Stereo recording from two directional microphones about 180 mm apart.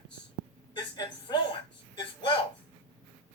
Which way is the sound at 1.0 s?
25° left (ahead or behind).